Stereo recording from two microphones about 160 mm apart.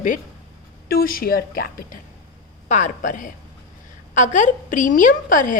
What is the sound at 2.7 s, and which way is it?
A woman's voice, 50° left (ahead or behind).